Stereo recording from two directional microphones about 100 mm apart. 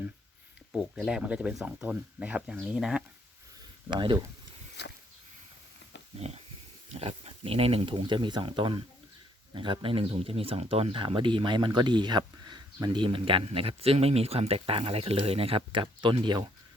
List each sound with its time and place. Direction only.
0.8 s speech: 5° right (ahead or behind)
3.8 s speech: 50° right (ahead or behind)
6.1 s speech: 90° right
7.0 s speech: 75° right (ahead or behind); by 16.5 s 50° right (ahead or behind)